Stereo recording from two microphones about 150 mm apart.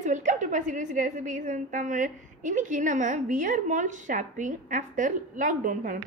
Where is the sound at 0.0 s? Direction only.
55° right (ahead or behind).